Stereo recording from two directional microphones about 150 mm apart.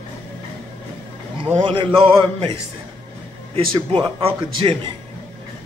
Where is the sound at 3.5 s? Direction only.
35° right (ahead or behind).